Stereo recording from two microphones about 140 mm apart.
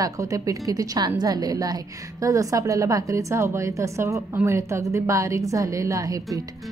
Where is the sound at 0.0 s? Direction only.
25° right (ahead or behind).